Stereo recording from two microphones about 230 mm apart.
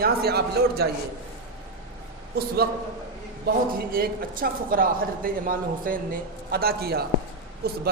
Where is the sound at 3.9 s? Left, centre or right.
Right.